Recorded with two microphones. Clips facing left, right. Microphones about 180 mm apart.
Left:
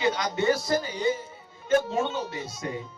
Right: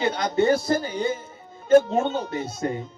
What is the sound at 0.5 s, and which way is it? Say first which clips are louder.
Speech: right 4 dB; 50° right (ahead or behind).